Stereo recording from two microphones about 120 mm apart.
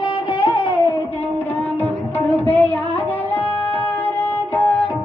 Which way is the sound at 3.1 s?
15° left (ahead or behind).